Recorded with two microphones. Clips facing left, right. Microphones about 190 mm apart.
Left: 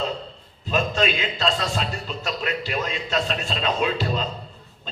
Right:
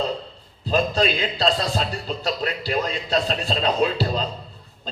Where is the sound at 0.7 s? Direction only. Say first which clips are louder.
Right 2 dB; 35° right (ahead or behind).